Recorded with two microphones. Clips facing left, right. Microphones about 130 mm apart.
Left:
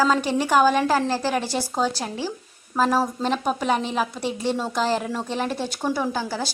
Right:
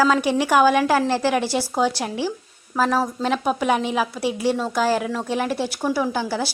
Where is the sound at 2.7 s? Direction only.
Centre (ahead or behind).